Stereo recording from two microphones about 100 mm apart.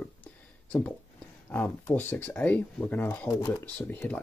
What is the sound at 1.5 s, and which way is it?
Speech, 15° left (ahead or behind).